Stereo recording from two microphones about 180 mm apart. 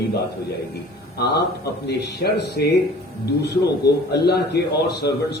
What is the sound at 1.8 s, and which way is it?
A man's voice, 65° left (ahead or behind).